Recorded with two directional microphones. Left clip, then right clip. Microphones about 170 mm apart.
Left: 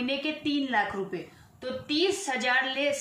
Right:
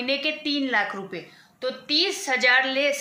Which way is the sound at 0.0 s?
25° right (ahead or behind).